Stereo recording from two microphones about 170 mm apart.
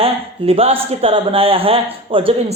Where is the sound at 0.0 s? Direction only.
35° right (ahead or behind).